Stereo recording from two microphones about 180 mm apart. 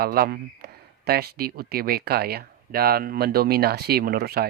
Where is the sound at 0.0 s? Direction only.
60° right (ahead or behind).